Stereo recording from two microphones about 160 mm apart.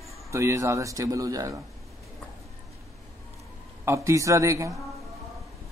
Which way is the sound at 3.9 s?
20° right (ahead or behind).